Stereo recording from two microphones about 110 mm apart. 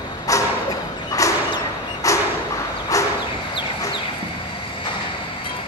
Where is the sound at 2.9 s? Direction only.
30° left (ahead or behind).